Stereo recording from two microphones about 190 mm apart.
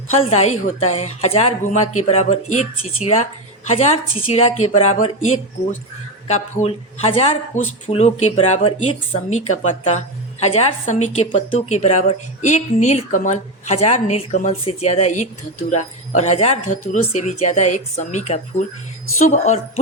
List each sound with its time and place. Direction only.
0.2 s a woman's voice: 35° left (ahead or behind)